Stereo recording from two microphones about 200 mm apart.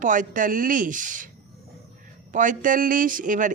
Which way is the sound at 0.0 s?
40° right (ahead or behind).